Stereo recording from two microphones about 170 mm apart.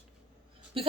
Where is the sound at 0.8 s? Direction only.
35° right (ahead or behind).